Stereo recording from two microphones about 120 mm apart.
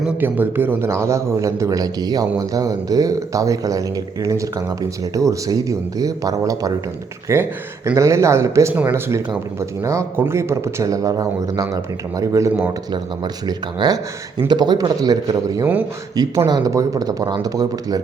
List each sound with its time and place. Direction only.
0.2 s a man's voice: 15° right (ahead or behind)
12.9 s speech: 35° right (ahead or behind)